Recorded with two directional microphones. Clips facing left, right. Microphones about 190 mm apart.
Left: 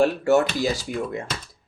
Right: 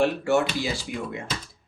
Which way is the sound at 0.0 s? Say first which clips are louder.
Left 3 dB; 40° left (ahead or behind).